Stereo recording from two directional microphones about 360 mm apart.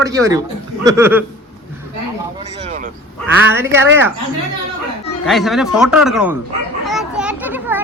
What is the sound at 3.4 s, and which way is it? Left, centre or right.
Speech, centre.